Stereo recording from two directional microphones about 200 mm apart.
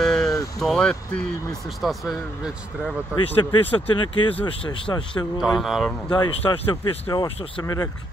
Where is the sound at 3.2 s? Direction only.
25° left (ahead or behind).